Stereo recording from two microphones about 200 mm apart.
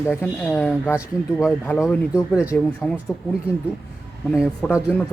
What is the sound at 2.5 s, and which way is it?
Speech, 5° left (ahead or behind).